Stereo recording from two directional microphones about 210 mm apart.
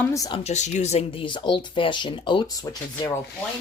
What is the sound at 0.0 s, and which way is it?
Speech, 15° left (ahead or behind).